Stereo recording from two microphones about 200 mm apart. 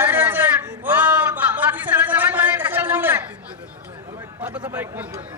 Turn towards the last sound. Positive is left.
turn(degrees=-10)  # may be behind; listen again after turning